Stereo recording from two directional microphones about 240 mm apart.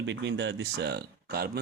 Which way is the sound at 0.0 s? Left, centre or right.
Right.